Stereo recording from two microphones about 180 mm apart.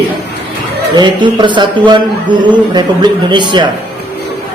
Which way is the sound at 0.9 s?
25° right (ahead or behind).